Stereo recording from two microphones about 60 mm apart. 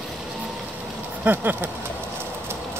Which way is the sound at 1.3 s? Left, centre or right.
Right.